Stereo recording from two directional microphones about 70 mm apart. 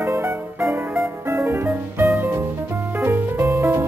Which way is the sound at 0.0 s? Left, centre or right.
Right.